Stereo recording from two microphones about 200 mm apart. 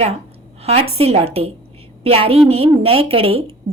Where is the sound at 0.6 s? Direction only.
30° right (ahead or behind).